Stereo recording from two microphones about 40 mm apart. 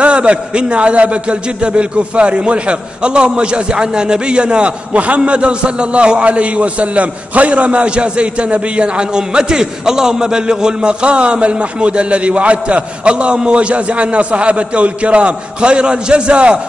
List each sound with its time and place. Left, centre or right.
0.0 s a man's voice: right